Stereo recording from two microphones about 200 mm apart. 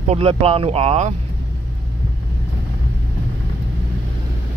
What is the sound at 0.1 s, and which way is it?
Speech, 30° right (ahead or behind).